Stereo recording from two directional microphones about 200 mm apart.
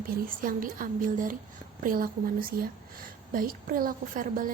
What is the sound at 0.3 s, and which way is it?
Speech, 45° right (ahead or behind).